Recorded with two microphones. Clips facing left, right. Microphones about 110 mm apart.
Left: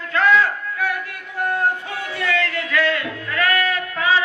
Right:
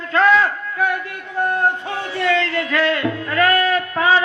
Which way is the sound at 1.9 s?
30° right (ahead or behind).